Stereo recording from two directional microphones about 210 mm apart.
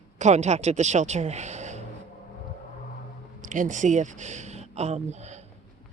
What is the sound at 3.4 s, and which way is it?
A man's voice, 40° right (ahead or behind).